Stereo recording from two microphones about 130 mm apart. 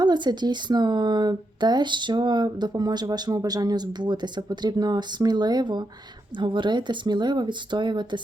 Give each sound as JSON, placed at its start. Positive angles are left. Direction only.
{"t": 0.0, "sound": "speech", "side_deg": -35}